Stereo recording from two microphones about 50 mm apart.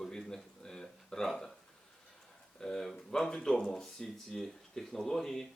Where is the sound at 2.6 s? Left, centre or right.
Centre.